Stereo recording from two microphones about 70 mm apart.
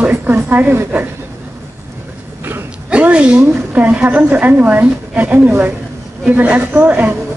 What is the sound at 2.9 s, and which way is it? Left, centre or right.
A woman's voice, centre.